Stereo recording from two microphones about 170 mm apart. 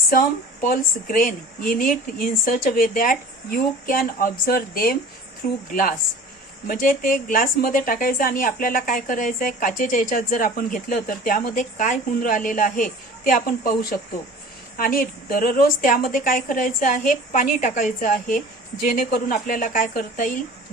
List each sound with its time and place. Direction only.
0.1 s speech: 55° left (ahead or behind)
6.7 s a woman's voice: 55° left (ahead or behind)